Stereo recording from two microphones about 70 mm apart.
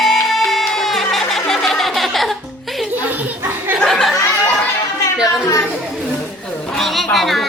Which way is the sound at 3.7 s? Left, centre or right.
Centre.